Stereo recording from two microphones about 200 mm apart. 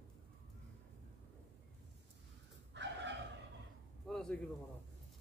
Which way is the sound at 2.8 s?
60° right (ahead or behind).